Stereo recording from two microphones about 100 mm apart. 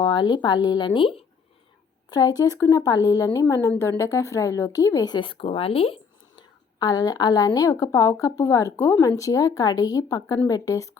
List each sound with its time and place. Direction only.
0.0 s a woman's voice: 50° left (ahead or behind)
2.0 s speech: 40° left (ahead or behind)
5.1 s speech: 60° left (ahead or behind)
6.7 s speech: 45° left (ahead or behind); by 9.0 s 25° left (ahead or behind)
9.0 s speech: 35° left (ahead or behind)